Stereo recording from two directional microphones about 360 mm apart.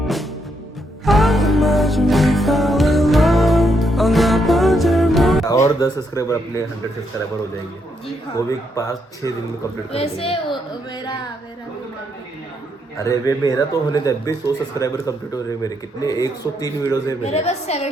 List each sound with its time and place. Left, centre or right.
1.0 s music: centre
5.6 s speech: centre
8.0 s speech: centre
13.0 s speech: centre